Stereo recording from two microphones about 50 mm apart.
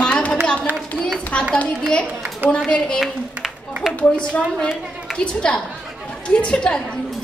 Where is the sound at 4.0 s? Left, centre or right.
Left.